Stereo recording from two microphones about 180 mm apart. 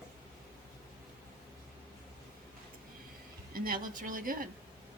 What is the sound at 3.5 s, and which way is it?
Speech, 55° right (ahead or behind).